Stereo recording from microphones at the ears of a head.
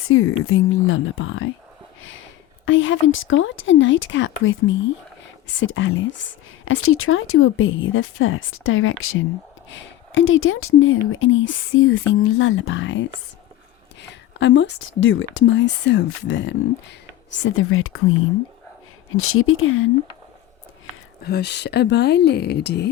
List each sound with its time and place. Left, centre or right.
0.0 s speech: left
2.6 s speech: left
21.2 s speech: left